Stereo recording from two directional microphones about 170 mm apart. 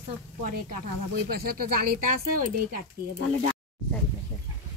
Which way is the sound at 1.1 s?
65° right (ahead or behind).